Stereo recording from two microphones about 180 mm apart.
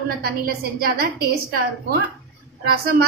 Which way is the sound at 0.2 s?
60° right (ahead or behind).